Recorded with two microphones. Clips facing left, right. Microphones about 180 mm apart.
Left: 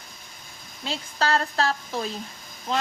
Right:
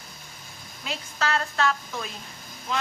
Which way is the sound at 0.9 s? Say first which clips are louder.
Left 3 dB; 35° left (ahead or behind).